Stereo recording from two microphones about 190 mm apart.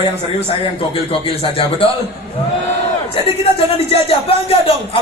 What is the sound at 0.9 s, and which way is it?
Speech, 30° left (ahead or behind).